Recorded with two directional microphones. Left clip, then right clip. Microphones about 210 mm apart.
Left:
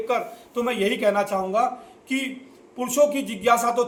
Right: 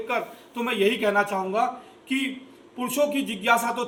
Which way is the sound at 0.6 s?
15° left (ahead or behind).